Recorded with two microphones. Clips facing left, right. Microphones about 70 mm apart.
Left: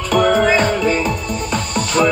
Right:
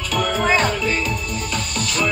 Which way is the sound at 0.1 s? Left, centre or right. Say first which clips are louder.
Left 6 dB; left.